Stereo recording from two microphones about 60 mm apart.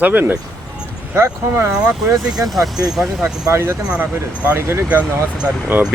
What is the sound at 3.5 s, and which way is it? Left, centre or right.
Speech, right.